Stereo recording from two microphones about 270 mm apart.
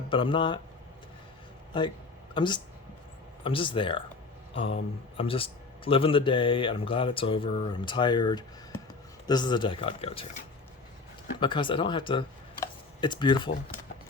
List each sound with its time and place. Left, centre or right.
0.1 s speech: centre
1.7 s speech: centre